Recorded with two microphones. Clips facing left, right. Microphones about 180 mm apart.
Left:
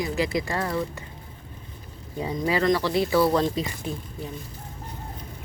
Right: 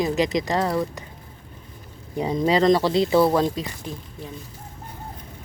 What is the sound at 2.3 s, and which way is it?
Speech, 25° right (ahead or behind).